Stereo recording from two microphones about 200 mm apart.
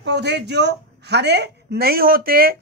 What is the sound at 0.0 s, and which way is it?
Speech, 60° right (ahead or behind).